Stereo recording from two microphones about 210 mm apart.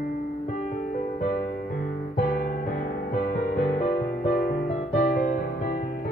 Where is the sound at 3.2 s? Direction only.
45° left (ahead or behind).